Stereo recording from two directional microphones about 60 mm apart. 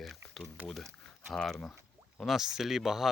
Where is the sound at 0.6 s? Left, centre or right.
Right.